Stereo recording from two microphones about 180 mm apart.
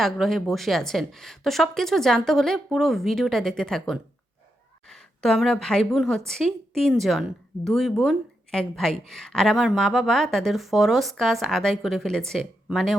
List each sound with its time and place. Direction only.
0.0 s a woman's voice: centre (ahead or behind)